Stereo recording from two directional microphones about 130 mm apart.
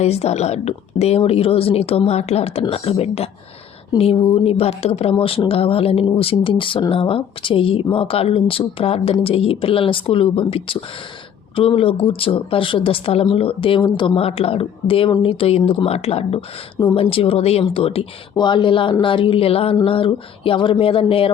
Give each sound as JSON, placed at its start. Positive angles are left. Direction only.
{"t": 0.0, "sound": "a woman's voice", "side_deg": 55}
{"t": 18.3, "sound": "a woman's voice", "side_deg": 35}